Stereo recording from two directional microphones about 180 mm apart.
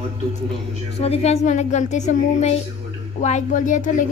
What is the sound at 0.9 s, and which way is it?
Speech, 35° left (ahead or behind).